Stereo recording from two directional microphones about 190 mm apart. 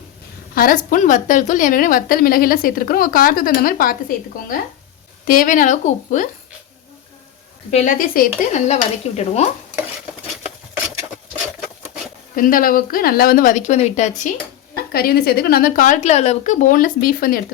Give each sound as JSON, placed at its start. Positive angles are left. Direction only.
{"t": 0.5, "sound": "a woman's voice", "side_deg": 50}
{"t": 5.2, "sound": "a woman's voice", "side_deg": 45}
{"t": 7.7, "sound": "stir", "side_deg": 45}
{"t": 12.4, "sound": "a woman's voice", "side_deg": 50}
{"t": 14.9, "sound": "a woman's voice", "side_deg": 55}